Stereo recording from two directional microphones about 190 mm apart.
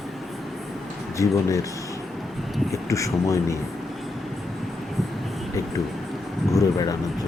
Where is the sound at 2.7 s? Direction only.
15° left (ahead or behind).